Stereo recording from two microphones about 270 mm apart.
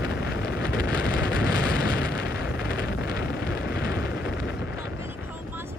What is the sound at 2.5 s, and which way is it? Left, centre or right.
Vehicle, left.